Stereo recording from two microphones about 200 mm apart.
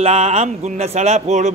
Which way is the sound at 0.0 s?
35° right (ahead or behind).